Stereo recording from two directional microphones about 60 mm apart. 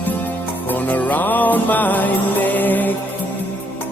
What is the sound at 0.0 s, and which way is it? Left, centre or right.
Music, left.